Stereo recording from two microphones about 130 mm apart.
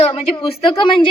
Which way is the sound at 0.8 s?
40° left (ahead or behind).